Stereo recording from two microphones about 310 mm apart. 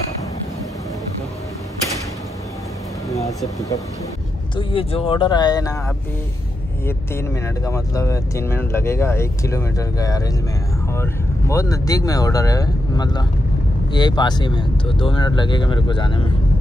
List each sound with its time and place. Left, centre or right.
3.1 s speech: centre
6.9 s speech: centre